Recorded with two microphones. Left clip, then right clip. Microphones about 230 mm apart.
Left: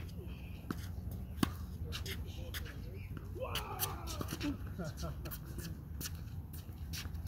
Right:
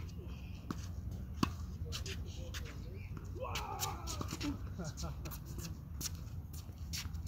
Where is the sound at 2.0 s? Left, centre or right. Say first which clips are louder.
Left 1 dB; left.